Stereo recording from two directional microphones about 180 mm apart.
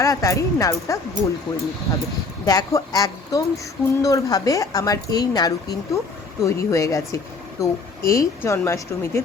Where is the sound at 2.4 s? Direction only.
20° left (ahead or behind).